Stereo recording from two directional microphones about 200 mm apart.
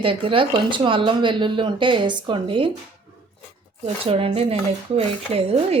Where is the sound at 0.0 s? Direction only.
25° right (ahead or behind).